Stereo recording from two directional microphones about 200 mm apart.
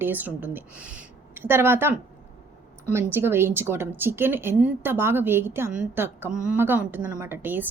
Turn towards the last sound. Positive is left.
turn(degrees=-10)  # may be behind; listen again after turning